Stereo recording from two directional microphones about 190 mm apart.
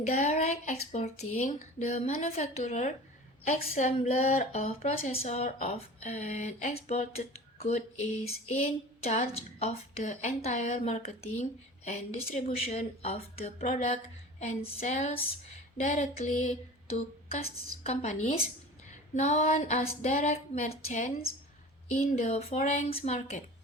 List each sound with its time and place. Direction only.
0.0 s a woman's voice: 35° left (ahead or behind)
17.8 s a woman's voice: 35° left (ahead or behind)
22.3 s a woman's voice: 35° left (ahead or behind)